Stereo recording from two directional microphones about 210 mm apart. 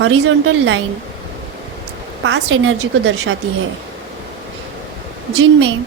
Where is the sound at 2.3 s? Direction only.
65° right (ahead or behind).